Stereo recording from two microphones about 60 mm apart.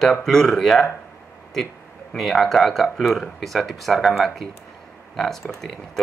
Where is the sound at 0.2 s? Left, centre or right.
Centre.